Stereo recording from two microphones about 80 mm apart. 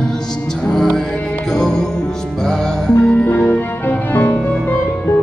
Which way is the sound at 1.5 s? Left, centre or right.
Centre.